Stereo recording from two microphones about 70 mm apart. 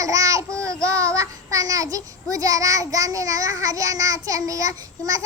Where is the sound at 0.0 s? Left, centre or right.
Right.